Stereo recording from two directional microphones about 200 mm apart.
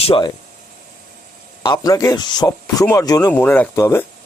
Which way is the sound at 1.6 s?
20° left (ahead or behind).